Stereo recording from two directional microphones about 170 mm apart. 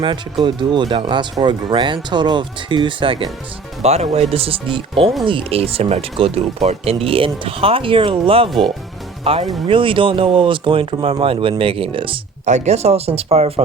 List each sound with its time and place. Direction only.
0.0 s speech: 30° right (ahead or behind)
8.4 s speech: centre (ahead or behind)
9.2 s speech: 35° right (ahead or behind)
12.5 s speech: 40° right (ahead or behind)